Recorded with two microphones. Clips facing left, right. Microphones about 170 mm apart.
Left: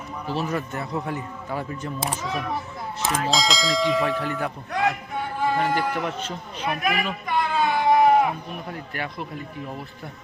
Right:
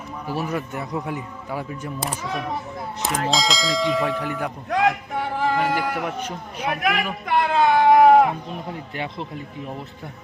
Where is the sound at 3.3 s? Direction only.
Centre (ahead or behind).